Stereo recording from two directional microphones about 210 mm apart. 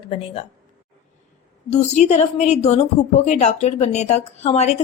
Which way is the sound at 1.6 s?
35° left (ahead or behind).